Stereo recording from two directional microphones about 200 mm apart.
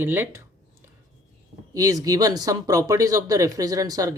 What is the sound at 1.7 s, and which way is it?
Speech, 20° right (ahead or behind).